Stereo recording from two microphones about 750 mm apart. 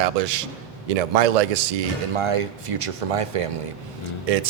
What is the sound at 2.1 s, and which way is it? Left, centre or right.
Speech, right.